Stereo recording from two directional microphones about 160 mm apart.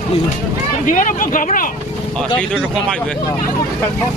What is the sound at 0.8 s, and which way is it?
Speech, 55° left (ahead or behind).